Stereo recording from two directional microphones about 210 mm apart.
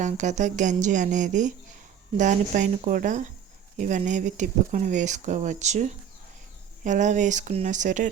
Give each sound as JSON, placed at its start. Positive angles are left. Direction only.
{"t": 0.0, "sound": "speech", "side_deg": -35}